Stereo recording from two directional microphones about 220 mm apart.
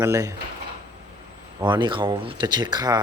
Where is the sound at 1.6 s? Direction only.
20° right (ahead or behind).